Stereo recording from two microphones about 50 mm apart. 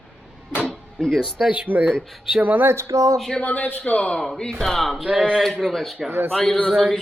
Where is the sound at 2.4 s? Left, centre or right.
Right.